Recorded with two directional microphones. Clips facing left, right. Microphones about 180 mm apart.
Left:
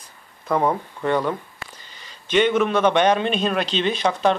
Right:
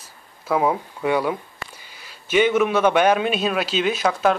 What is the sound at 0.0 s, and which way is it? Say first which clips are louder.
Speech: right 1 dB; 5° right (ahead or behind).